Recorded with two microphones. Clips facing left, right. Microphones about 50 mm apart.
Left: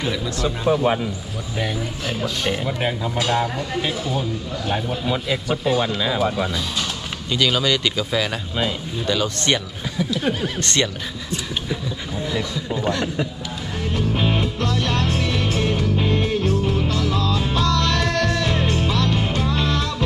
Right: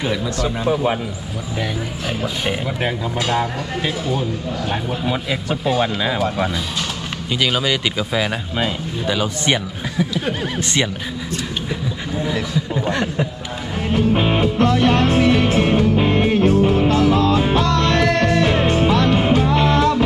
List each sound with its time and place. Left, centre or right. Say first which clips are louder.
2.0 s speech: right 1 dB; centre
7.3 s speech: even; centre
13.7 s music: right 6 dB; right